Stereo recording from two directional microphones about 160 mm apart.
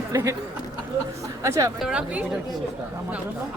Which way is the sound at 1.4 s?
20° right (ahead or behind).